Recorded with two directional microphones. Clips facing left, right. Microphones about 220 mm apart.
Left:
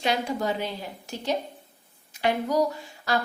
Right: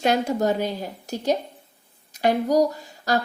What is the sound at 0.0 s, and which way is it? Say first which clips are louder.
A woman's voice: right 5 dB; 45° right (ahead or behind).